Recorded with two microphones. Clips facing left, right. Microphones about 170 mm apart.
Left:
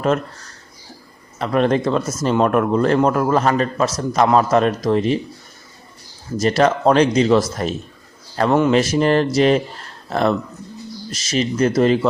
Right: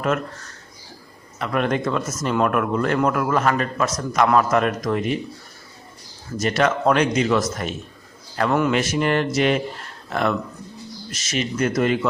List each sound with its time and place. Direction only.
1.4 s speech: 30° left (ahead or behind)
6.4 s speech: 35° left (ahead or behind)